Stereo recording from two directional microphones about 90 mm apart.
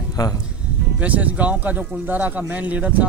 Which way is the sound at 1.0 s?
15° right (ahead or behind).